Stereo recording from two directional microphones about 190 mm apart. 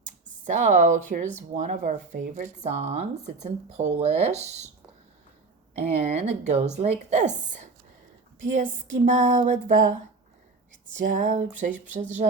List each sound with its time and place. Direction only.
0.4 s speech: 40° right (ahead or behind)
5.7 s speech: 35° right (ahead or behind)